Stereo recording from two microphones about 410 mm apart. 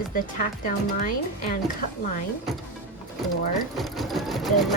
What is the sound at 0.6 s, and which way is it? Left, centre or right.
Speech, centre.